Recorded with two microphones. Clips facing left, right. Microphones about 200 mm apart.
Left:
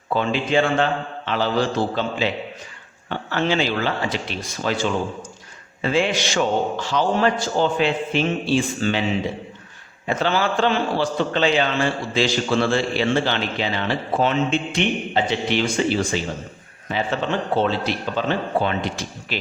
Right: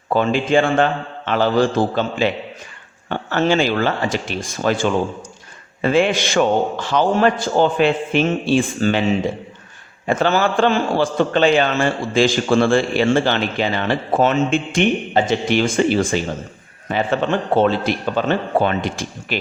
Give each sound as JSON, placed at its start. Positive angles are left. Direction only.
{"t": 0.1, "sound": "a man's voice", "side_deg": -45}
{"t": 10.1, "sound": "a man's voice", "side_deg": -45}
{"t": 17.5, "sound": "a man's voice", "side_deg": -50}